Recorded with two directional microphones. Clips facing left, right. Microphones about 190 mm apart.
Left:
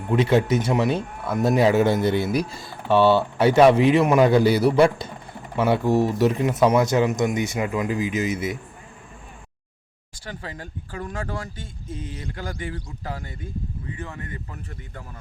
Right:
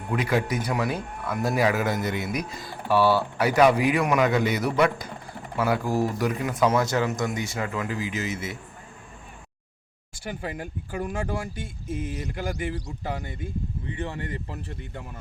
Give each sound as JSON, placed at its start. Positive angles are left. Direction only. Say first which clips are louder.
{"t": 0.1, "sound": "speech", "louder": "left 6 dB", "side_deg": 25}
{"t": 10.9, "sound": "speech", "louder": "right 2 dB", "side_deg": -10}
{"t": 13.9, "sound": "speech", "louder": "right 6 dB", "side_deg": -25}